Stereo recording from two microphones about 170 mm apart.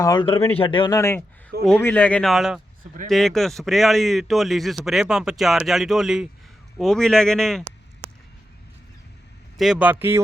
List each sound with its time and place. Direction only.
0.0 s speech: 25° left (ahead or behind)
0.9 s a man's voice: 15° left (ahead or behind)
9.6 s speech: 5° right (ahead or behind)